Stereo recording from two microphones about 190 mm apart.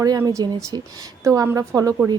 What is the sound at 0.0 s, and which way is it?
A woman's voice, 20° right (ahead or behind).